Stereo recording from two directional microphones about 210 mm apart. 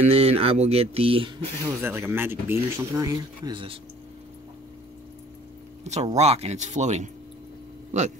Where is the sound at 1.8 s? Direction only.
10° right (ahead or behind).